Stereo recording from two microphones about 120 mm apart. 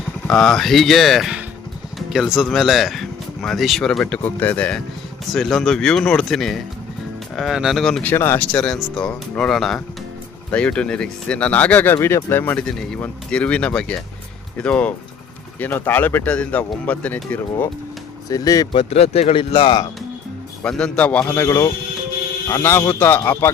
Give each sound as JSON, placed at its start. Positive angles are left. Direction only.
{"t": 0.3, "sound": "speech", "side_deg": 5}
{"t": 8.0, "sound": "speech", "side_deg": 20}
{"t": 18.3, "sound": "speech", "side_deg": 30}
{"t": 18.7, "sound": "speech", "side_deg": 55}
{"t": 20.7, "sound": "speech", "side_deg": 5}